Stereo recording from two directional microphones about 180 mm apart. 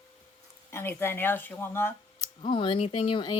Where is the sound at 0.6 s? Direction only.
15° left (ahead or behind).